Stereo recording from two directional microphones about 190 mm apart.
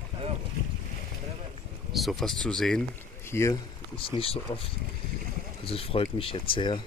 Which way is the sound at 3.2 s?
15° left (ahead or behind).